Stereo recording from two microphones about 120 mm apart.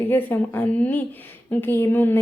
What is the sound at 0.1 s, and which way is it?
A woman's voice, 15° left (ahead or behind).